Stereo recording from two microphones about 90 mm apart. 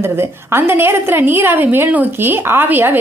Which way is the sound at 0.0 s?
25° right (ahead or behind).